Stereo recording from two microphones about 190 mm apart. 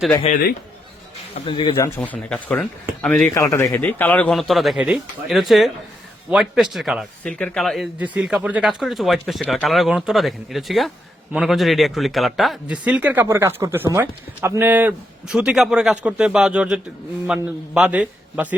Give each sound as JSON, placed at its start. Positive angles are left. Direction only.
{"t": 0.3, "sound": "a man's voice", "side_deg": 35}
{"t": 1.5, "sound": "speech", "side_deg": 25}
{"t": 2.0, "sound": "speech", "side_deg": 5}
{"t": 3.3, "sound": "speech", "side_deg": 15}